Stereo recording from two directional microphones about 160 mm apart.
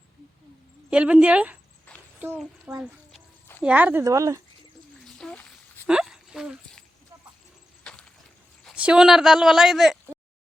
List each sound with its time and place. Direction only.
0.9 s a woman's voice: 5° right (ahead or behind)
2.1 s a sound: 15° right (ahead or behind)
2.7 s a woman's voice: 10° right (ahead or behind)
4.0 s speech: 20° right (ahead or behind)
5.0 s a sound: 5° left (ahead or behind)
8.6 s speech: 5° right (ahead or behind)